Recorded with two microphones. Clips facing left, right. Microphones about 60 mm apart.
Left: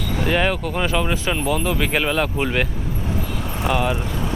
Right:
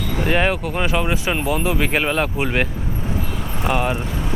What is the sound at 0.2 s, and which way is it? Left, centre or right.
Speech, centre.